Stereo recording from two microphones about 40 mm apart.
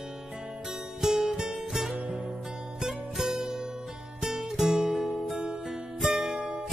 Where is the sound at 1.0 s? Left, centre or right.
Centre.